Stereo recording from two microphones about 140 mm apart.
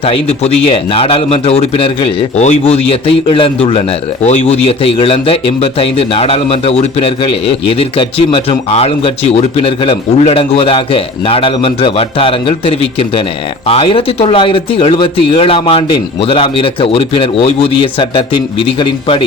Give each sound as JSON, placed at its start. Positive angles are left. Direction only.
{"t": 0.0, "sound": "a man's voice", "side_deg": 45}